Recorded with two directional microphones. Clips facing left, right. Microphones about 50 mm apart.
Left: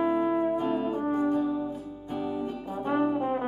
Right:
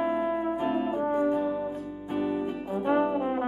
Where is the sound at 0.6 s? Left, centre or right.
Right.